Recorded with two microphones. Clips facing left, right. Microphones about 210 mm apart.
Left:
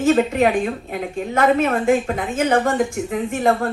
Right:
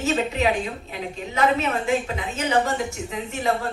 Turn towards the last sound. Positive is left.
turn(degrees=50)  # may be behind; listen again after turning